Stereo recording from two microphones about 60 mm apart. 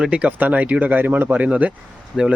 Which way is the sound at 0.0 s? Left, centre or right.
Centre.